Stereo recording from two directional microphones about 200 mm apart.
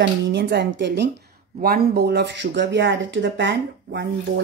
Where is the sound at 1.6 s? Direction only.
50° right (ahead or behind).